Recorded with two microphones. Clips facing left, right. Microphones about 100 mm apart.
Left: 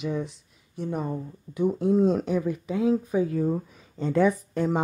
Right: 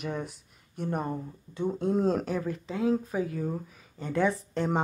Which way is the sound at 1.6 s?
15° left (ahead or behind).